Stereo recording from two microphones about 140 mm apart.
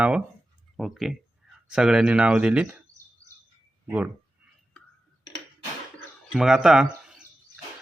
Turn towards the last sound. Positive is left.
turn(degrees=-5)  # may be behind; listen again after turning